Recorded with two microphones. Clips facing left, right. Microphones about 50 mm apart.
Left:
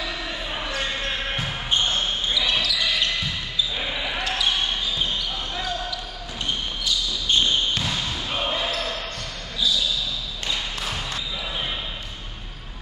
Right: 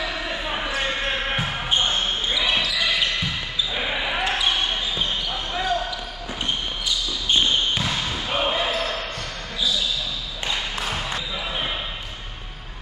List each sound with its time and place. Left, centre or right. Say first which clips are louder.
0.3 s basketball bounce: right 3 dB; centre
7.2 s basketball bounce: right 1 dB; centre
10.5 s basketball bounce: right 2 dB; centre